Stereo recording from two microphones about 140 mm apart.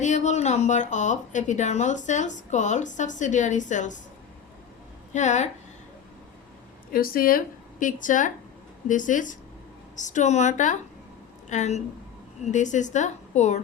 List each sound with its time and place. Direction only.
0.0 s speech: 55° left (ahead or behind)
5.1 s speech: 60° left (ahead or behind)
6.9 s a woman's voice: 90° left; by 13.6 s 55° left (ahead or behind)